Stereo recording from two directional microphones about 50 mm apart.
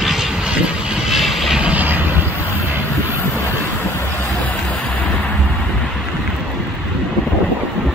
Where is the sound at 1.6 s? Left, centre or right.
Right.